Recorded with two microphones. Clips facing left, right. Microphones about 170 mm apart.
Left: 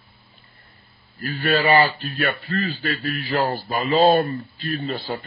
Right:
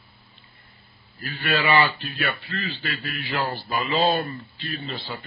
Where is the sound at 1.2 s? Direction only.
40° left (ahead or behind).